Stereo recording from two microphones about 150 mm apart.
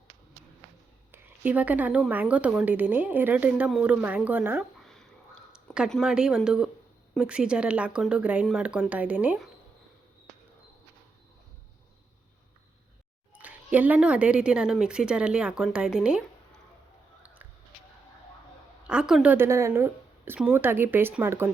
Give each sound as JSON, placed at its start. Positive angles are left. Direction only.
{"t": 1.1, "sound": "a woman's voice", "side_deg": -10}
{"t": 4.8, "sound": "a sound", "side_deg": 5}
{"t": 5.7, "sound": "a woman's voice", "side_deg": -5}
{"t": 13.3, "sound": "a woman's voice", "side_deg": -10}
{"t": 18.9, "sound": "a woman's voice", "side_deg": -5}